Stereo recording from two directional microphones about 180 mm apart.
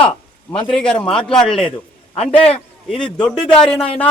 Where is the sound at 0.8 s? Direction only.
5° left (ahead or behind).